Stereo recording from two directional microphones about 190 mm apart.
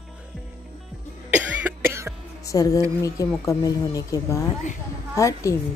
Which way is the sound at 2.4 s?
20° left (ahead or behind).